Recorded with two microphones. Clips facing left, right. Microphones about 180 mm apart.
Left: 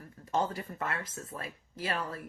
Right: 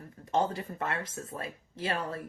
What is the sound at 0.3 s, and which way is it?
Speech, 25° right (ahead or behind).